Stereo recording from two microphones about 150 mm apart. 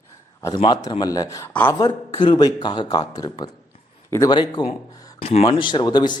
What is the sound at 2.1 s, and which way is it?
A man's voice, 30° left (ahead or behind).